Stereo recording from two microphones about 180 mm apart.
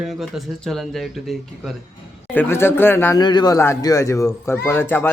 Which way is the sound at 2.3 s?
10° left (ahead or behind).